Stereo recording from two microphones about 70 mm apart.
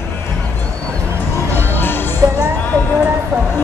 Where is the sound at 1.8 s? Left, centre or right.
Left.